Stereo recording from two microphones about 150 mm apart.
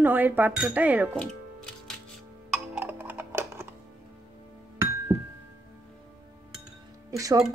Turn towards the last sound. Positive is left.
turn(degrees=-20)  # may be behind; listen again after turning